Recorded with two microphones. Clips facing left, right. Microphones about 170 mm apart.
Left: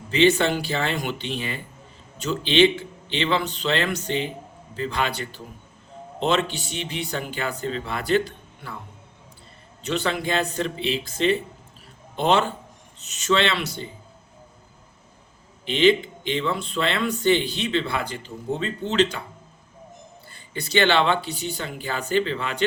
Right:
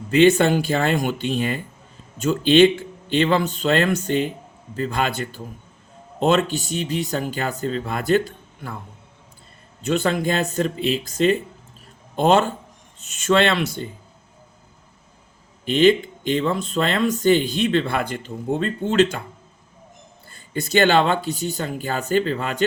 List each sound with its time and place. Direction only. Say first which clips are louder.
0.1 s speech: right 4 dB; 50° right (ahead or behind)
9.8 s speech: right 5 dB; 45° right (ahead or behind)
15.6 s speech: right 3 dB; 45° right (ahead or behind)
20.3 s speech: right 3 dB; 45° right (ahead or behind)